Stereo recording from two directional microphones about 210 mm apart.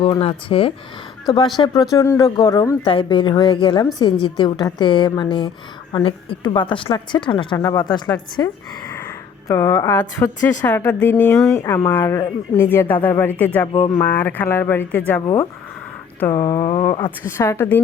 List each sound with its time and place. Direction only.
0.0 s a woman's voice: 25° left (ahead or behind)
8.9 s a sound: 15° left (ahead or behind)
10.7 s speech: 10° left (ahead or behind)
16.3 s a woman's voice: 20° left (ahead or behind)
17.2 s speech: 10° left (ahead or behind)